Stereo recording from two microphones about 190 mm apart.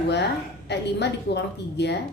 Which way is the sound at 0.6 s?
60° left (ahead or behind).